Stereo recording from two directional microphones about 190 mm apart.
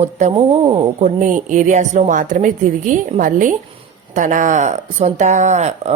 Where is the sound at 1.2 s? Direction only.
40° right (ahead or behind).